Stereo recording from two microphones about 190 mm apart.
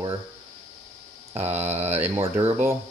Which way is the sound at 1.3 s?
35° right (ahead or behind).